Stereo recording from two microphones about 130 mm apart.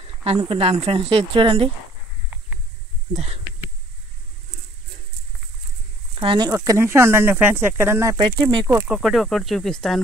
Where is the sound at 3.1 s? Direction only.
55° right (ahead or behind).